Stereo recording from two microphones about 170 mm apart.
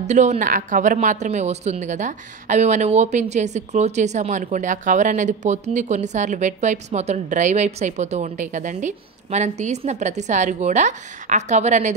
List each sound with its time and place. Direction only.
0.0 s speech: 45° right (ahead or behind)